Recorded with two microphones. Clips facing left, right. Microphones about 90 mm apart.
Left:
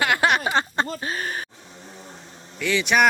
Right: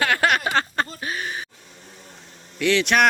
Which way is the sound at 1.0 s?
40° left (ahead or behind).